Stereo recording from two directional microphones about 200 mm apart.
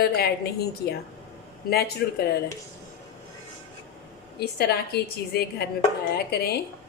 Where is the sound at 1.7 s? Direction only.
50° left (ahead or behind).